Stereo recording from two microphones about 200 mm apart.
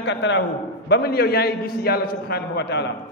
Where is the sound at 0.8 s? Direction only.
50° left (ahead or behind).